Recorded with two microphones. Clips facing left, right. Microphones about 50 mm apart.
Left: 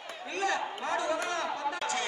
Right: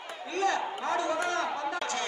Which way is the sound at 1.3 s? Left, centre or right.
Centre.